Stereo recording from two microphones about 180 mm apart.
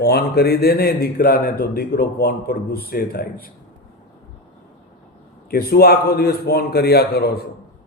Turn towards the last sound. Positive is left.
turn(degrees=60)  # may be behind; listen again after turning